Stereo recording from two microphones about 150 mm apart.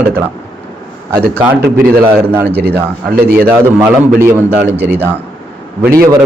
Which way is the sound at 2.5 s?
90° right.